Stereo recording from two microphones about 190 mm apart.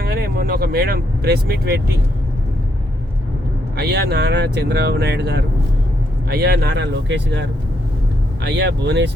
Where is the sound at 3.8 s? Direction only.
60° right (ahead or behind).